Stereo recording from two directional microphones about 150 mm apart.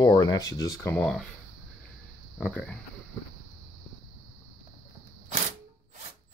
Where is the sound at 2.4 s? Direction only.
10° left (ahead or behind).